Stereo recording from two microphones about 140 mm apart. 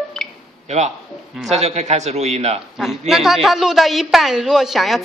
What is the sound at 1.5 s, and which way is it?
A man's voice, 50° right (ahead or behind).